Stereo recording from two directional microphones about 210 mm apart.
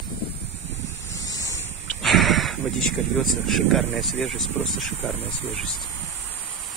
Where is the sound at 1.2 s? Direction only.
15° left (ahead or behind).